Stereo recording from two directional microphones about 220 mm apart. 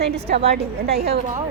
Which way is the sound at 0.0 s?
45° right (ahead or behind).